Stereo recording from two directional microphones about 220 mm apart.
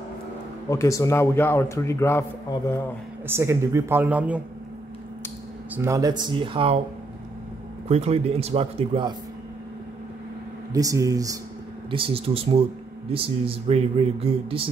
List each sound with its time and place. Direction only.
0.7 s a man's voice: 15° left (ahead or behind)
3.3 s speech: 10° right (ahead or behind)
5.8 s speech: 15° right (ahead or behind)
7.9 s speech: 30° right (ahead or behind)
10.7 s speech: 15° right (ahead or behind)